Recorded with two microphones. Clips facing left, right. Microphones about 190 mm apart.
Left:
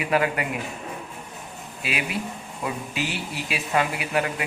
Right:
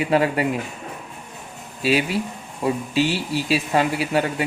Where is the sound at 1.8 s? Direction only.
30° right (ahead or behind).